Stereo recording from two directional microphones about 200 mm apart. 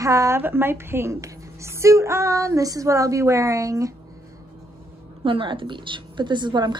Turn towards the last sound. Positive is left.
turn(degrees=-20)  # may be behind; listen again after turning